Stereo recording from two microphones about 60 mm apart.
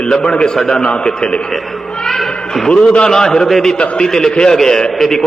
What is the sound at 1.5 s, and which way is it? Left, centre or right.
Speech, centre.